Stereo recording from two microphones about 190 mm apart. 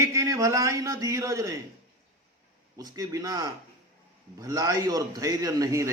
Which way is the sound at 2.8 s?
20° right (ahead or behind).